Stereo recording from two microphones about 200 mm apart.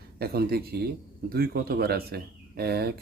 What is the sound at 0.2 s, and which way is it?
Speech, 50° right (ahead or behind).